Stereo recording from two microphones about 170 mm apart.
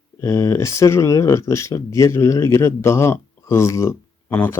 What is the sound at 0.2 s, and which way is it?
Speech, 15° left (ahead or behind).